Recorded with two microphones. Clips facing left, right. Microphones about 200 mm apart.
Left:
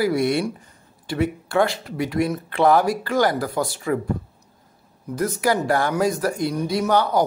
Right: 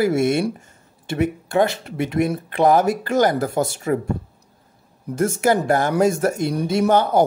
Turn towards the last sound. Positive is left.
turn(degrees=-25)  # may be behind; listen again after turning